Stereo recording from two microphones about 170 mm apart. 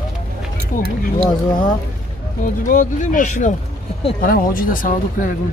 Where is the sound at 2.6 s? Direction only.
50° left (ahead or behind).